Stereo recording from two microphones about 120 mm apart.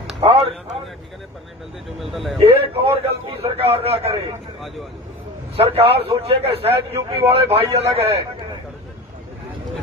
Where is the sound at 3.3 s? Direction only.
50° right (ahead or behind).